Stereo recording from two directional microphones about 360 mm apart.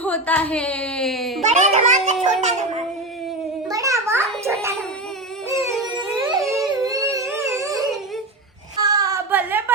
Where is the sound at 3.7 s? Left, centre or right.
Centre.